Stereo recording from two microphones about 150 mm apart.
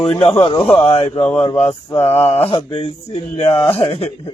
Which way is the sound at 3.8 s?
40° left (ahead or behind).